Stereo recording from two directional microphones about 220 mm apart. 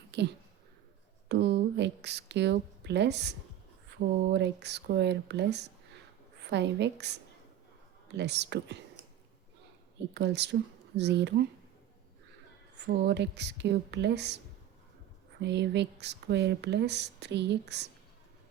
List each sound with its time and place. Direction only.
0.1 s a woman's voice: 50° right (ahead or behind)
10.2 s speech: 50° right (ahead or behind)
12.7 s speech: 50° right (ahead or behind)
15.4 s speech: 50° right (ahead or behind)